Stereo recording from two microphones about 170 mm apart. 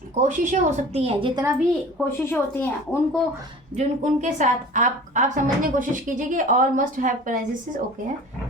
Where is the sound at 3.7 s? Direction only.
45° right (ahead or behind).